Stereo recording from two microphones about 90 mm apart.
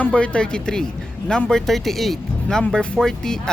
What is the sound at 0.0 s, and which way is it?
Speech, 10° left (ahead or behind).